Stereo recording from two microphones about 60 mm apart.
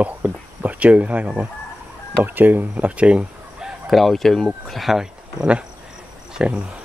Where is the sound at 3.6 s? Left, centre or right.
Centre.